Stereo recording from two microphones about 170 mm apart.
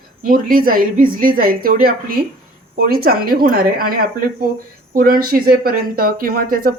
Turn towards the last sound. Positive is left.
turn(degrees=-60)  # may be behind; listen again after turning